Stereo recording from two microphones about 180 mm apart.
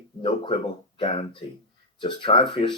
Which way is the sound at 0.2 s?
30° left (ahead or behind).